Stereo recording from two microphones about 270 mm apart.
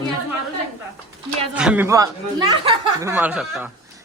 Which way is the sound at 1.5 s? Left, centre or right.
Centre.